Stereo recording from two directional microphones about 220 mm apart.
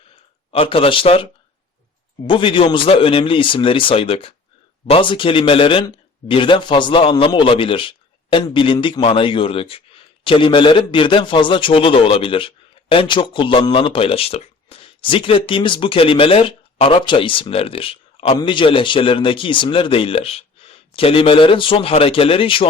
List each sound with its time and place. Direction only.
0.5 s speech: 25° left (ahead or behind)